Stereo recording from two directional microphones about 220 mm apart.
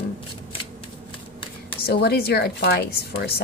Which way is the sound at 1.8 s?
50° left (ahead or behind).